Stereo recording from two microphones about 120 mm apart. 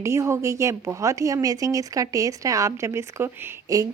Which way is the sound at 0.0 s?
25° right (ahead or behind).